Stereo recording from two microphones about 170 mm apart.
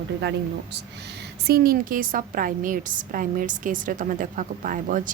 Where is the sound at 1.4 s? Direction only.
60° right (ahead or behind).